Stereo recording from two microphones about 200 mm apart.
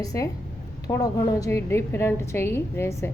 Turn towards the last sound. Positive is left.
turn(degrees=15)  # may be behind; listen again after turning